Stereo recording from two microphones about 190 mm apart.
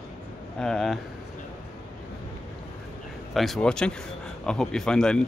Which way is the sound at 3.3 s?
Centre (ahead or behind).